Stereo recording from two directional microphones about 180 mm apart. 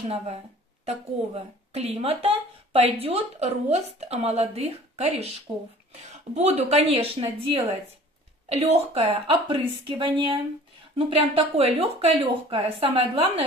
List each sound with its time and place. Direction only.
0.8 s a woman's voice: 35° right (ahead or behind)